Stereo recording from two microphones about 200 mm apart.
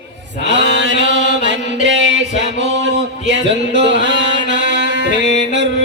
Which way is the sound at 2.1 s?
35° left (ahead or behind).